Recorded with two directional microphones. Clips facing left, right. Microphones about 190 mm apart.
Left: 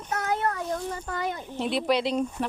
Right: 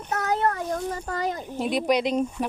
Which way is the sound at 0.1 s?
40° right (ahead or behind).